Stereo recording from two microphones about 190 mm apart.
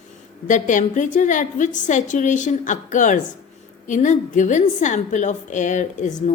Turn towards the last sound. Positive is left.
turn(degrees=40)  # may be behind; listen again after turning